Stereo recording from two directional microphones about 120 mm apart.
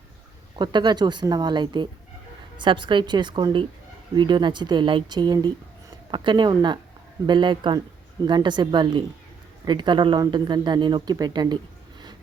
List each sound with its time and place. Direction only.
0.5 s speech: 40° right (ahead or behind)